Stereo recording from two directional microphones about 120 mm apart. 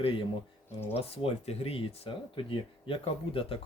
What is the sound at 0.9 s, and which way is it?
Speech, 55° left (ahead or behind).